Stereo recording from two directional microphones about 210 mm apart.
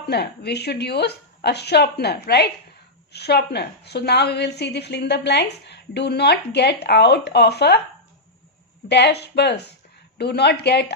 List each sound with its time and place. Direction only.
0.1 s a woman's voice: 50° left (ahead or behind)
8.9 s a woman's voice: 55° left (ahead or behind)